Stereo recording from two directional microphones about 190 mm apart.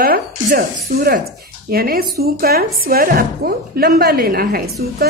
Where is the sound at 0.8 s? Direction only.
50° right (ahead or behind).